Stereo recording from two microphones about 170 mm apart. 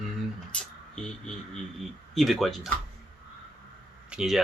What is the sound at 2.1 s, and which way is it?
Speech, centre (ahead or behind).